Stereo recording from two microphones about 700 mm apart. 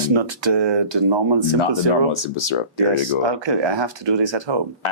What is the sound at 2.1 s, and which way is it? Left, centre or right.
Speech, left.